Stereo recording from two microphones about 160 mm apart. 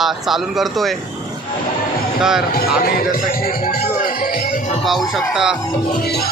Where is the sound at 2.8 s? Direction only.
70° left (ahead or behind); by 4.8 s 50° left (ahead or behind).